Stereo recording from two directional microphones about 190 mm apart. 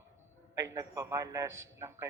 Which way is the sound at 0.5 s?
15° right (ahead or behind).